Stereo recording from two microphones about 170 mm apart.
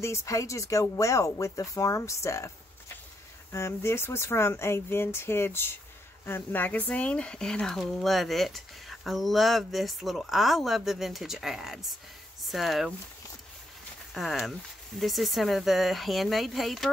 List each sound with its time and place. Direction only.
0.0 s speech: 15° left (ahead or behind)
3.5 s speech: 15° left (ahead or behind); by 12.9 s centre (ahead or behind)
14.1 s speech: centre (ahead or behind)